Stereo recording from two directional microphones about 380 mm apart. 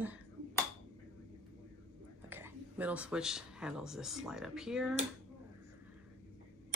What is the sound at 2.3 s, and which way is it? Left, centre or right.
Speech, centre.